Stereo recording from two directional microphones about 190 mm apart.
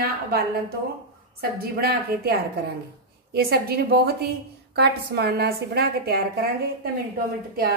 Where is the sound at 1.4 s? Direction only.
55° right (ahead or behind).